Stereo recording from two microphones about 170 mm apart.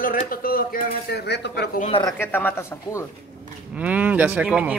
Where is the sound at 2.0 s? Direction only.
15° left (ahead or behind).